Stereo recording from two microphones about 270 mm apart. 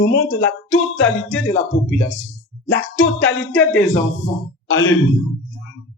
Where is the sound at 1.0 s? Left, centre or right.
Left.